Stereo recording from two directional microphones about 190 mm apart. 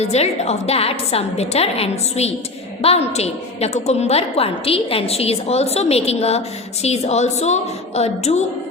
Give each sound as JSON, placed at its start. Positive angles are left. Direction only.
{"t": 0.0, "sound": "a woman's voice", "side_deg": 35}